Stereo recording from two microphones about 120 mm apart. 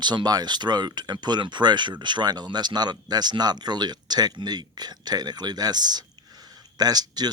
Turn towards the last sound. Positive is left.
turn(degrees=-35)  # may be behind; listen again after turning